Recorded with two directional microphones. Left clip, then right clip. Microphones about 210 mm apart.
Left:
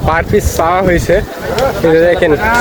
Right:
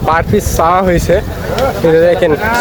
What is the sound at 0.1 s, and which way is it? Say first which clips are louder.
Speech: even; 5° right (ahead or behind).